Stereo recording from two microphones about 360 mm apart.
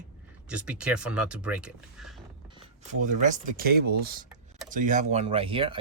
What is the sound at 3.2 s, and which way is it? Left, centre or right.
Speech, right.